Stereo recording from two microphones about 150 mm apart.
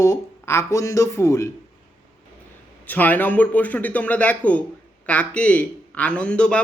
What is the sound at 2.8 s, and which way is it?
A man's voice, 10° left (ahead or behind).